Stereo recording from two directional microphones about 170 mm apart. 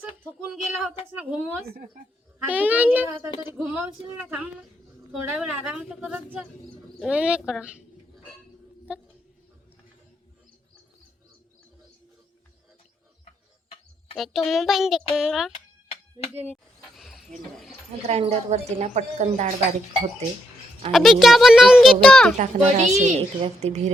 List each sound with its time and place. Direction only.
0.0 s speech: 10° right (ahead or behind)
2.5 s a child's voice: 10° right (ahead or behind)
14.2 s a child's voice: centre (ahead or behind)
16.9 s wild animals: centre (ahead or behind)
18.1 s a woman's voice: 40° right (ahead or behind)
20.9 s a child's voice: centre (ahead or behind)
22.4 s a child's voice: 45° right (ahead or behind)